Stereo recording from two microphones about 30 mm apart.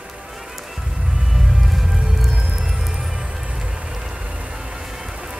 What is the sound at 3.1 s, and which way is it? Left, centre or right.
Music, right.